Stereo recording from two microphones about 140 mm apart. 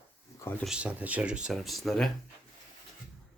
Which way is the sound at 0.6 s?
5° right (ahead or behind).